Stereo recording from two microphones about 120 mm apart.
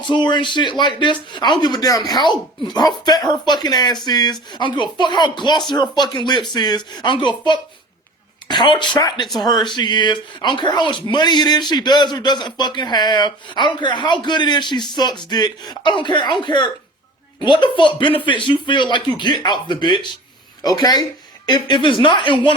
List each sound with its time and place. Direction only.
0.1 s speech: 40° left (ahead or behind)